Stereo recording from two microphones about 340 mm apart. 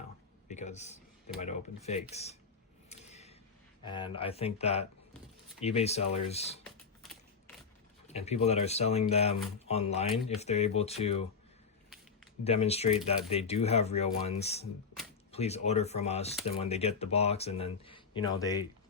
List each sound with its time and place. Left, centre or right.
0.5 s speech: centre
2.9 s a sound: centre
3.8 s speech: centre
6.7 s a sound: centre
8.1 s speech: centre
12.5 s speech: centre